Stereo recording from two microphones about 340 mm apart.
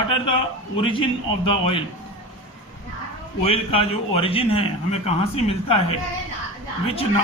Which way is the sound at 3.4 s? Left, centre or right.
Centre.